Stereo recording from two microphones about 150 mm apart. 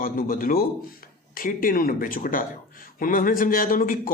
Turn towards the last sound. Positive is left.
turn(degrees=65)  # may be behind; listen again after turning